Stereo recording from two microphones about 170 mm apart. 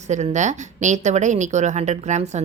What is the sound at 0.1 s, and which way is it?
Speech, 45° right (ahead or behind).